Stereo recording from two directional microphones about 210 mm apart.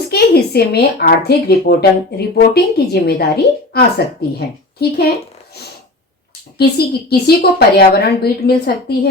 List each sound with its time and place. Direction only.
0.1 s speech: 50° left (ahead or behind)
6.6 s speech: 50° left (ahead or behind)